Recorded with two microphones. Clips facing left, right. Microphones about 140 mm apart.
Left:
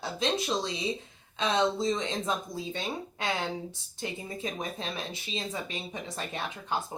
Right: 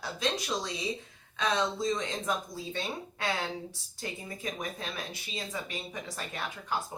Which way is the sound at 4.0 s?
25° left (ahead or behind).